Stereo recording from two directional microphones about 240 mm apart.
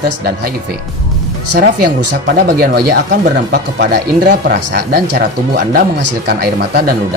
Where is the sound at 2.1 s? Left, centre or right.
Right.